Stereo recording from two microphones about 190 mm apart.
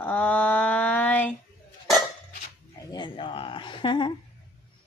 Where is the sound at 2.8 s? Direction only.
20° left (ahead or behind).